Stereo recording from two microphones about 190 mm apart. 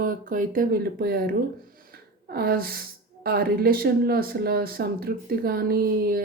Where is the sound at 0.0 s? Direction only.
45° right (ahead or behind).